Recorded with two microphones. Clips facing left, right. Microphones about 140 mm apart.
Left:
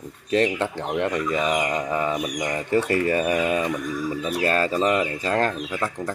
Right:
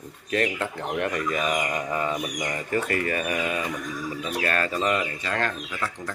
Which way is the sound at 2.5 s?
25° left (ahead or behind).